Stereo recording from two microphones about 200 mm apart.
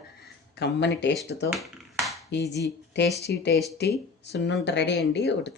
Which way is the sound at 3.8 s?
55° left (ahead or behind).